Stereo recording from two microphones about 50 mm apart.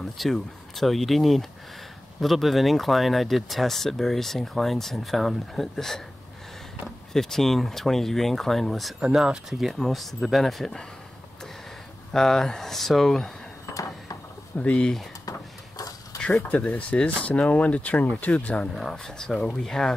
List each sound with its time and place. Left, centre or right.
0.0 s speech: centre
7.1 s speech: centre
9.0 s speech: centre
12.1 s speech: centre
14.6 s speech: left
16.4 s speech: left
18.8 s speech: centre